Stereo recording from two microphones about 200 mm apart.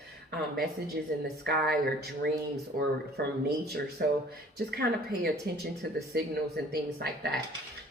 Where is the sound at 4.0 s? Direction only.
50° right (ahead or behind).